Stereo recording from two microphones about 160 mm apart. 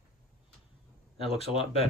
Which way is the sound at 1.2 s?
40° left (ahead or behind).